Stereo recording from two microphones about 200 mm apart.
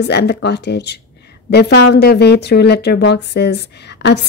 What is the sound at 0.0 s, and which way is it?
Speech, 55° left (ahead or behind).